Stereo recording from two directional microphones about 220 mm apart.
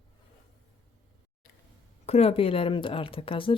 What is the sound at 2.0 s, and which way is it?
Speech, 30° left (ahead or behind).